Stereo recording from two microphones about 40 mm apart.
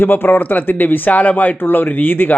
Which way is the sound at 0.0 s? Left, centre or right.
Left.